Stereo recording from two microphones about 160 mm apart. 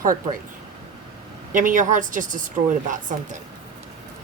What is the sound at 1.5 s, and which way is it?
Speech, 55° right (ahead or behind).